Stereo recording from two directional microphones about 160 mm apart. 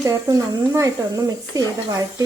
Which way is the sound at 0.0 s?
20° right (ahead or behind).